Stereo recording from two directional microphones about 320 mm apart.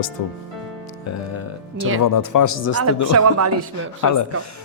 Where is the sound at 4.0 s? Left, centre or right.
Left.